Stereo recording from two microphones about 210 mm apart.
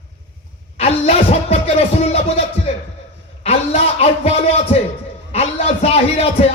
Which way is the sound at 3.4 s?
30° left (ahead or behind).